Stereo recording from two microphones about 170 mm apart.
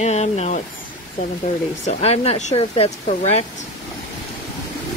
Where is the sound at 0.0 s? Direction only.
40° left (ahead or behind).